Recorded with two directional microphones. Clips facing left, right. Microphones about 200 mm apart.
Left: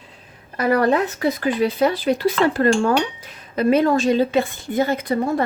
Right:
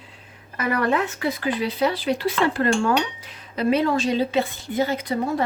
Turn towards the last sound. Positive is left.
turn(degrees=55)  # may be behind; listen again after turning